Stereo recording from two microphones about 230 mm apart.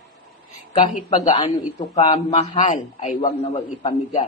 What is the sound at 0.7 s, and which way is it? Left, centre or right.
A man's voice, left.